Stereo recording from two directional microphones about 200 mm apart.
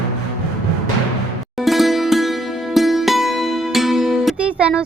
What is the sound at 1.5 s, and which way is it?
Music, centre (ahead or behind).